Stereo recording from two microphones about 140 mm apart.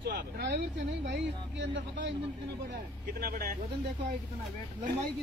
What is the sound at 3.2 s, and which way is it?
Speech, 90° right.